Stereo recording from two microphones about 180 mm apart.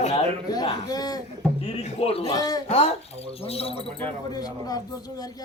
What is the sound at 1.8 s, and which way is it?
Speech, 35° left (ahead or behind).